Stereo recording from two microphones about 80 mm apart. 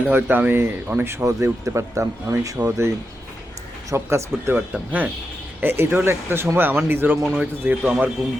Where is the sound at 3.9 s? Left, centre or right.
Right.